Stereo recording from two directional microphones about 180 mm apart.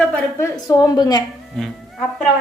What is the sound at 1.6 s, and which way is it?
Speech, centre (ahead or behind).